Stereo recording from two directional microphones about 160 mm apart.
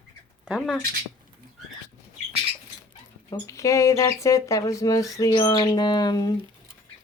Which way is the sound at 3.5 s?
20° left (ahead or behind).